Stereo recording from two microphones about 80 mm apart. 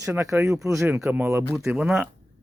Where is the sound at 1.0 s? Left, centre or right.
Right.